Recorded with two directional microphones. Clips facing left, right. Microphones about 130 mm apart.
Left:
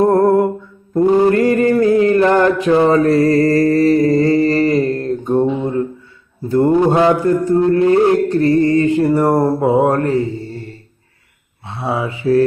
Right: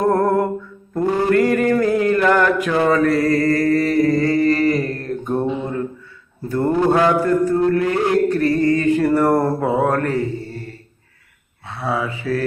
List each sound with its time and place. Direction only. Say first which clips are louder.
0.0 s a sound: left 5 dB; 25° left (ahead or behind)
0.9 s mantra: left 5 dB; 20° left (ahead or behind)
11.6 s mantra: left 2 dB; 25° left (ahead or behind)